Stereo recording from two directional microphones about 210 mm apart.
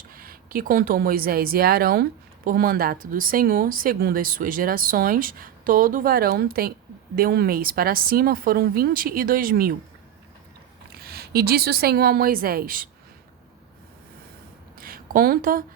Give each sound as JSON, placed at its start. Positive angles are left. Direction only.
{"t": 0.1, "sound": "a woman's voice", "side_deg": -45}
{"t": 10.9, "sound": "a woman's voice", "side_deg": -50}
{"t": 14.8, "sound": "a sound", "side_deg": -45}